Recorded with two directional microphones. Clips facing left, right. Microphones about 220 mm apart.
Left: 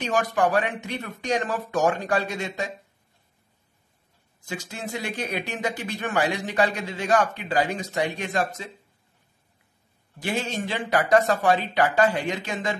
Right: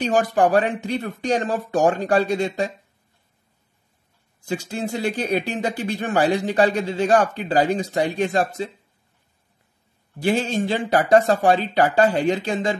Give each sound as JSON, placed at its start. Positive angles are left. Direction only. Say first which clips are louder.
{"t": 0.0, "sound": "speech", "louder": "right 5 dB", "side_deg": -30}
{"t": 4.5, "sound": "speech", "louder": "right 7 dB", "side_deg": -30}
{"t": 10.2, "sound": "speech", "louder": "right 7 dB", "side_deg": -35}